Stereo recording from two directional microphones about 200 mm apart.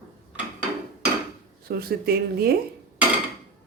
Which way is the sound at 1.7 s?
50° right (ahead or behind).